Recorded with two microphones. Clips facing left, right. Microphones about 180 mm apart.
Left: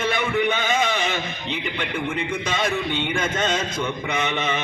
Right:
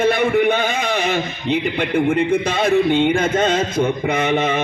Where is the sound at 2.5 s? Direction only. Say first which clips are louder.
Right 8 dB; 55° right (ahead or behind).